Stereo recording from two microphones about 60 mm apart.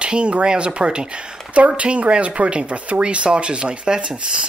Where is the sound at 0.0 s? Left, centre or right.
Centre.